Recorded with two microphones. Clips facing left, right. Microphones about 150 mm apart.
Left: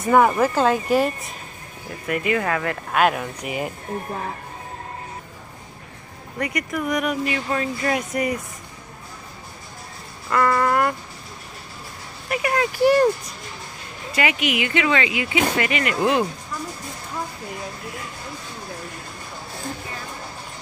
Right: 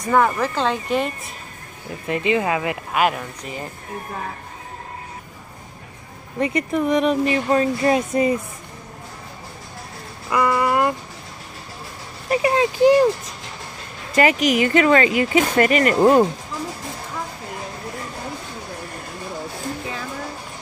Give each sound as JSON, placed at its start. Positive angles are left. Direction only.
{"t": 0.1, "sound": "speech", "side_deg": 10}
{"t": 2.0, "sound": "speech", "side_deg": -25}
{"t": 2.9, "sound": "speech", "side_deg": 0}
{"t": 3.4, "sound": "speech", "side_deg": 10}
{"t": 6.4, "sound": "speech", "side_deg": -30}
{"t": 10.3, "sound": "a sound", "side_deg": -10}
{"t": 12.3, "sound": "speech", "side_deg": -25}
{"t": 14.1, "sound": "speech", "side_deg": -40}